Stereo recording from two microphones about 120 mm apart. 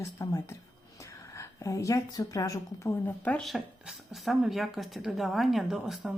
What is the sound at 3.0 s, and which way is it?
Speech, 15° left (ahead or behind).